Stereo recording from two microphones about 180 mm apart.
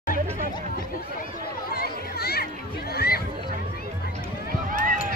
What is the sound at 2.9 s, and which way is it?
Run, 60° left (ahead or behind).